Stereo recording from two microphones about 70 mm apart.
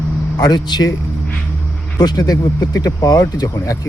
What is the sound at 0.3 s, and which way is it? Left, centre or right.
Speech, left.